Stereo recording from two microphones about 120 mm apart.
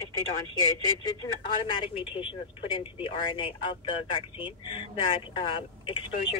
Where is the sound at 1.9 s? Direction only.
45° left (ahead or behind).